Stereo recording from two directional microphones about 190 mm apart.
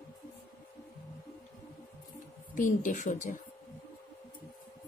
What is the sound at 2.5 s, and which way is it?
Speech, 45° left (ahead or behind).